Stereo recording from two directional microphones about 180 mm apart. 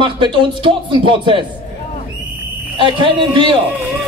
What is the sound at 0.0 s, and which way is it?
Speech, 25° right (ahead or behind).